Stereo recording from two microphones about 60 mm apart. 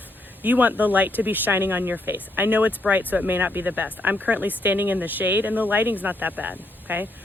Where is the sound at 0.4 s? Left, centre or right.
Right.